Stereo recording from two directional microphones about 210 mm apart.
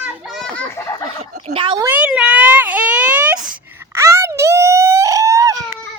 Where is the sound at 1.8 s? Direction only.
5° right (ahead or behind).